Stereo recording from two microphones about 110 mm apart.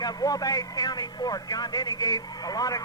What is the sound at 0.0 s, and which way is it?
Speech, 35° left (ahead or behind).